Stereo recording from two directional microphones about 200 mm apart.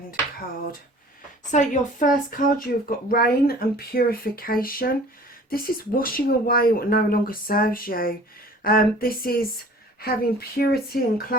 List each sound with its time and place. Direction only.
0.1 s speech: 45° left (ahead or behind)
10.6 s speech: 50° left (ahead or behind)